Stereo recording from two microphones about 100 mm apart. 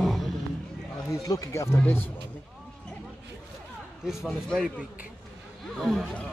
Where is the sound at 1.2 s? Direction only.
35° left (ahead or behind).